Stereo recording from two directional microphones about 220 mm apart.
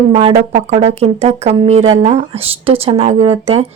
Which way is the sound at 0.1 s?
25° right (ahead or behind).